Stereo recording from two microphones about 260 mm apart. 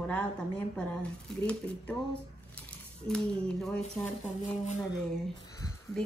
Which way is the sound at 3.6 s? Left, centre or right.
Centre.